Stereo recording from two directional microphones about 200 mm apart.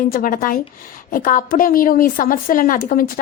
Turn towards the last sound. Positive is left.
turn(degrees=45)  # may be behind; listen again after turning